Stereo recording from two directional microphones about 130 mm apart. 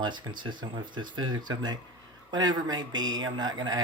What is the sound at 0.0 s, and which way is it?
Speech, 35° right (ahead or behind).